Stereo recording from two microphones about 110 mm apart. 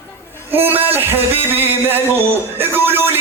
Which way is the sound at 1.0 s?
20° right (ahead or behind).